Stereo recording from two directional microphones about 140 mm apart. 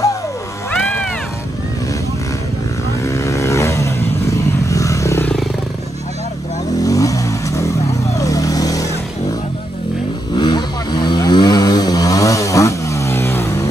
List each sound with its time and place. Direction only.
0.7 s a sound: 10° left (ahead or behind)
3.1 s vehicle: 20° left (ahead or behind)
6.8 s vehicle: 25° left (ahead or behind)
10.3 s chainsaw: 30° left (ahead or behind)